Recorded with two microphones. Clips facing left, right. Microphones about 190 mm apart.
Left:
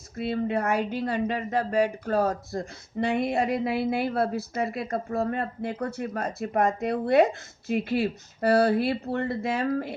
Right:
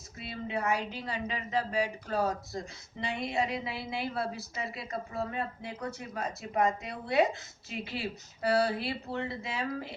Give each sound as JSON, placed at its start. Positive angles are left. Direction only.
{"t": 0.2, "sound": "speech", "side_deg": 55}